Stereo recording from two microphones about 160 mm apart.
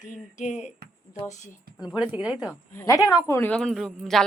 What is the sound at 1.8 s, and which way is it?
Speech, 5° right (ahead or behind).